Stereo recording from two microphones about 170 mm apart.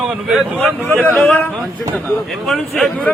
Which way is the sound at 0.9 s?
5° left (ahead or behind).